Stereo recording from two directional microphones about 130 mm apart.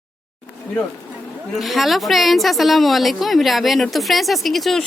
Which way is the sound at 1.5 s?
Centre (ahead or behind).